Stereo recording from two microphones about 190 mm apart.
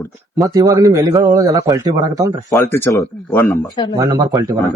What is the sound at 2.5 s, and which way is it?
A man's voice, 15° left (ahead or behind).